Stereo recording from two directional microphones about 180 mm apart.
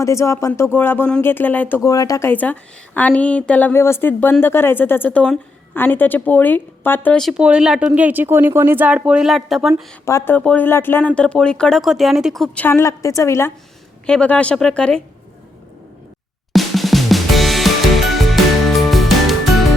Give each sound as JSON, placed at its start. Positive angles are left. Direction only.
{"t": 0.0, "sound": "speech", "side_deg": 15}
{"t": 10.1, "sound": "speech", "side_deg": 15}
{"t": 12.6, "sound": "speech", "side_deg": 15}
{"t": 16.5, "sound": "music", "side_deg": 0}